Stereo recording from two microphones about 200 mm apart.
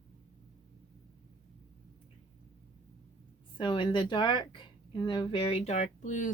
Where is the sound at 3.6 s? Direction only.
25° left (ahead or behind); by 6.3 s 40° left (ahead or behind).